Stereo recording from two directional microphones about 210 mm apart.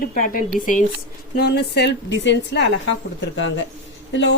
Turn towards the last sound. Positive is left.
turn(degrees=60)  # may be behind; listen again after turning